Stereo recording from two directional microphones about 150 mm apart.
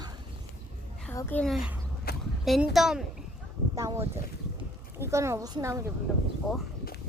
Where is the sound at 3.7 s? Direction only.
20° right (ahead or behind).